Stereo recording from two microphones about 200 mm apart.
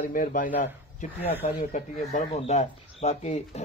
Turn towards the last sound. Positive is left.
turn(degrees=35)  # may be behind; listen again after turning